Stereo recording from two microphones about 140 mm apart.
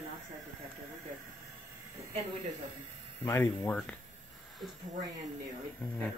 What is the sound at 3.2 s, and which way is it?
Speech, 20° left (ahead or behind).